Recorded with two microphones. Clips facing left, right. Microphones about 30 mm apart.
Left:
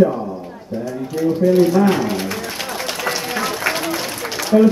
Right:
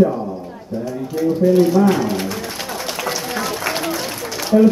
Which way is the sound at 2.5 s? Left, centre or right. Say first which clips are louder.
Left 1 dB; centre.